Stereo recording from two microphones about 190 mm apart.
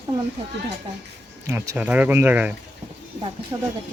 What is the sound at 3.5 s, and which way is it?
Speech, 20° right (ahead or behind).